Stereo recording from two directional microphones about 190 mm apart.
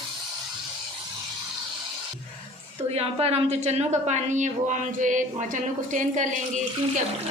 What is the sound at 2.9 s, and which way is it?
Speech, 30° right (ahead or behind).